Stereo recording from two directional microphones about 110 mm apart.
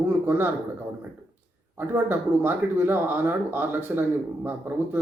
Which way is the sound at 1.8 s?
20° right (ahead or behind).